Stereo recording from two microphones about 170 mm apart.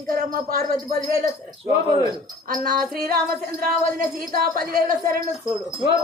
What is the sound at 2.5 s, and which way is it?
A woman's voice, 55° right (ahead or behind).